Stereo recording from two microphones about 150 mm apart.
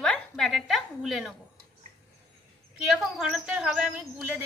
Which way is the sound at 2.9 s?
5° right (ahead or behind).